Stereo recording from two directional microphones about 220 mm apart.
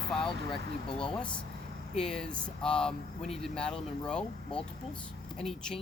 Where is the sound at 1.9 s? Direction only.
5° left (ahead or behind).